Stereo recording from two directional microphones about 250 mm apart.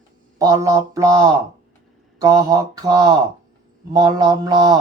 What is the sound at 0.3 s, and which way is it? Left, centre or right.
Mantra, centre.